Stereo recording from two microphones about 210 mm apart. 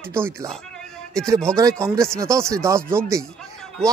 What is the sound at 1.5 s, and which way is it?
Speech, 5° left (ahead or behind).